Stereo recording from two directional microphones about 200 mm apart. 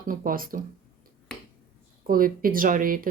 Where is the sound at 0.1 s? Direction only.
45° right (ahead or behind).